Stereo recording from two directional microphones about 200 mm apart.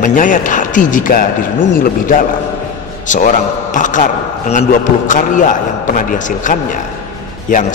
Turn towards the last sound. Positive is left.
turn(degrees=40)  # may be behind; listen again after turning